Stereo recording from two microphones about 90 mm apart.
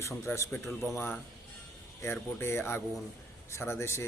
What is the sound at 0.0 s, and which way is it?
Speech, 30° left (ahead or behind).